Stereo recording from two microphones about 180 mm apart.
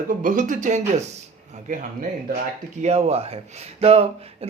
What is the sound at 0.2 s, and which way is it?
Speech, 45° right (ahead or behind).